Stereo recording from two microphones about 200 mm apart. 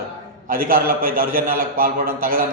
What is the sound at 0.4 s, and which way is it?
A man's voice, 45° right (ahead or behind).